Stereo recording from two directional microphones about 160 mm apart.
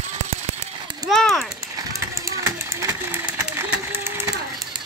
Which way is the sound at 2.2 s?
20° right (ahead or behind).